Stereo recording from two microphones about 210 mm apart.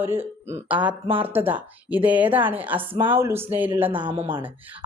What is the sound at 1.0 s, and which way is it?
Speech, 25° right (ahead or behind).